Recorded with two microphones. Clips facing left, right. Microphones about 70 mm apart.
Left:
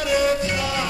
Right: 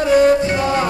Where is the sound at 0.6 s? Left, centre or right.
Right.